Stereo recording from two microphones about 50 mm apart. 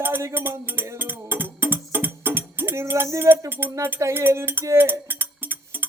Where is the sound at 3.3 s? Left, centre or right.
Right.